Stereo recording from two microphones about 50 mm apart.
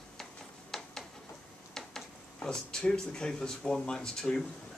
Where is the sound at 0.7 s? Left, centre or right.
Centre.